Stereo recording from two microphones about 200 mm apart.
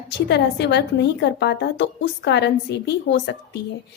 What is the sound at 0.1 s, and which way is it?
A woman's voice, 60° left (ahead or behind).